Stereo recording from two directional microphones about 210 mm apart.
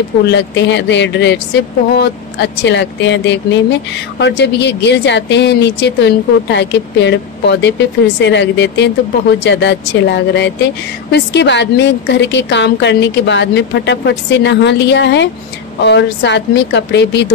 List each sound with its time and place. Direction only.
0.3 s speech: 55° left (ahead or behind)